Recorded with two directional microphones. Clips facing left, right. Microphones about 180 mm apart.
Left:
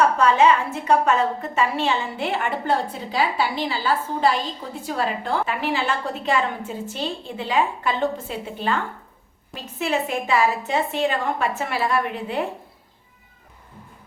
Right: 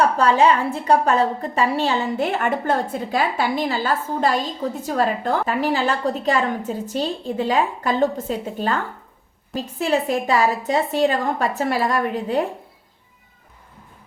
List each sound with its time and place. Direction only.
0.2 s a woman's voice: 35° right (ahead or behind)